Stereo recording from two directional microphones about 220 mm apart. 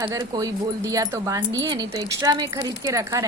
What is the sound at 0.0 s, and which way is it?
Speech, 15° right (ahead or behind).